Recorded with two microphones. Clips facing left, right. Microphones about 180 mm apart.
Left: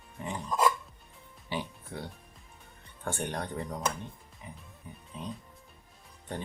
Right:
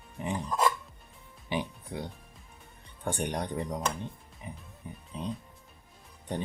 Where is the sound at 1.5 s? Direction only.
15° right (ahead or behind).